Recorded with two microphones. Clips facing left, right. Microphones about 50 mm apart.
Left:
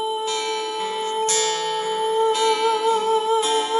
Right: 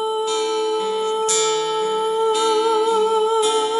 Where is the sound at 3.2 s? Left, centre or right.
Left.